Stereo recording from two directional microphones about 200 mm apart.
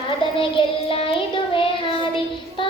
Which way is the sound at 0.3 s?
25° left (ahead or behind).